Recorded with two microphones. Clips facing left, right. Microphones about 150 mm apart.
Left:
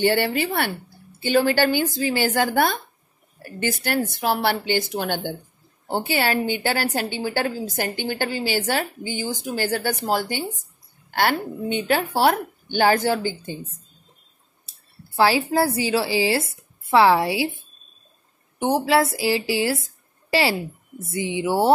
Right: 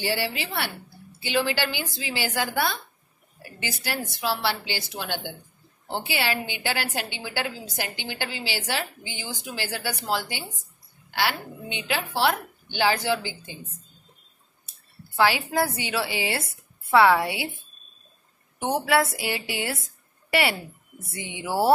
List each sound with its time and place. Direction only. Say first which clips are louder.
0.0 s a woman's voice: left 8 dB; 55° left (ahead or behind)
15.1 s speech: left 4 dB; 30° left (ahead or behind)
18.7 s speech: left 3 dB; 25° left (ahead or behind)